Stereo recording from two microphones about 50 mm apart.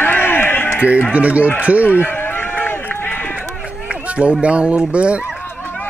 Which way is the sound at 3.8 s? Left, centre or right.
Right.